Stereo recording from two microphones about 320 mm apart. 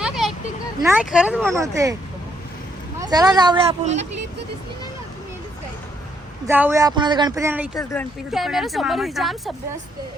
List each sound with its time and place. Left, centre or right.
0.0 s a sound: centre
0.9 s speech: centre
3.0 s speech: centre
6.5 s speech: centre